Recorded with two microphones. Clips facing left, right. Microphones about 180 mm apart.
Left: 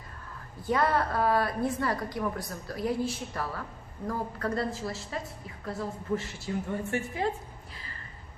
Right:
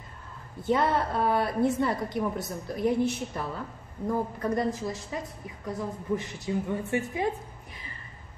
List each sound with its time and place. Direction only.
0.6 s a woman's voice: 25° right (ahead or behind)